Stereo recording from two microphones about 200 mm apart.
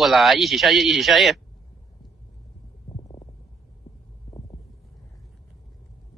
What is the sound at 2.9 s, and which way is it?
Stomach rumble, 25° left (ahead or behind).